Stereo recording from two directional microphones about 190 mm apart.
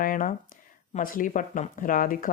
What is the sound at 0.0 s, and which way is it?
Speech, 45° left (ahead or behind).